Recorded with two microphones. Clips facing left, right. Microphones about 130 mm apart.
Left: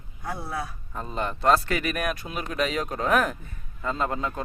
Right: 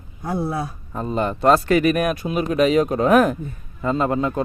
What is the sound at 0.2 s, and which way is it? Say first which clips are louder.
Speech: right 8 dB; 30° right (ahead or behind).